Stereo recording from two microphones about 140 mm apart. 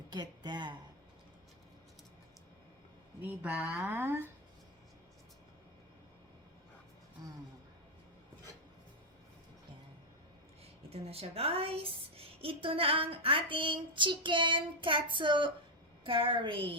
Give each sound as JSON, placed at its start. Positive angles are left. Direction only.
{"t": 0.1, "sound": "speech", "side_deg": -30}
{"t": 3.2, "sound": "speech", "side_deg": -10}
{"t": 7.2, "sound": "music", "side_deg": -30}
{"t": 10.8, "sound": "a woman's voice", "side_deg": -45}